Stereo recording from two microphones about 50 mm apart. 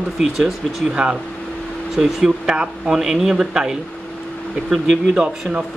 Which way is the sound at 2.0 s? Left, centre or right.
Centre.